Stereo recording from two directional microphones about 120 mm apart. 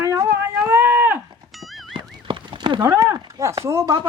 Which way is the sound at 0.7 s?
20° right (ahead or behind).